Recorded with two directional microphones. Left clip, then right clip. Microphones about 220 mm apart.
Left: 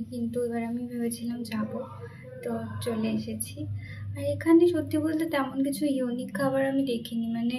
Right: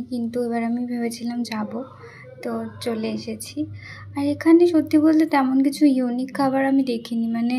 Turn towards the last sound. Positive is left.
turn(degrees=-40)  # may be behind; listen again after turning